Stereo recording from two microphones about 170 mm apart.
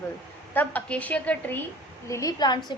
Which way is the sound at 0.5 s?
10° left (ahead or behind).